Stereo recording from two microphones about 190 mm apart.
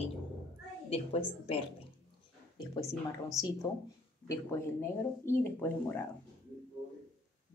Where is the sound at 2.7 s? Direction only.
15° left (ahead or behind).